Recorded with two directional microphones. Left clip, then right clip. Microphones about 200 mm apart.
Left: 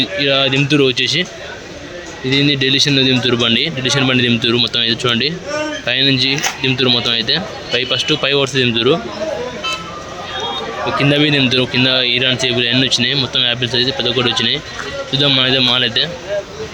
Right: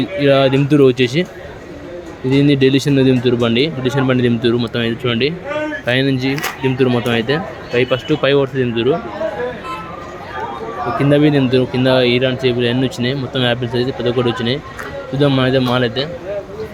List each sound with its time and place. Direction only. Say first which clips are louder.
0.0 s speech: right 1 dB; 15° right (ahead or behind)
2.3 s speech: right 1 dB; 15° right (ahead or behind); by 9.0 s centre (ahead or behind)
10.9 s speech: even; 10° right (ahead or behind)